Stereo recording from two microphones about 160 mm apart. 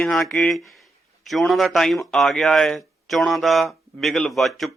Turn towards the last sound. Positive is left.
turn(degrees=0)  # may be behind; listen again after turning